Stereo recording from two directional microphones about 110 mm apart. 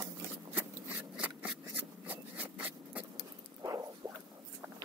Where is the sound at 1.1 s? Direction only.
10° right (ahead or behind).